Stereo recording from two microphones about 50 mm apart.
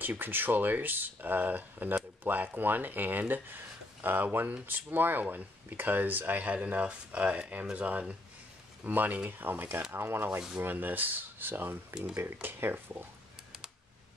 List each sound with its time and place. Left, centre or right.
0.0 s speech: right